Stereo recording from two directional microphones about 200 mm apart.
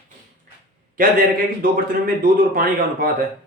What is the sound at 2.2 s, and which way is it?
Speech, 45° right (ahead or behind).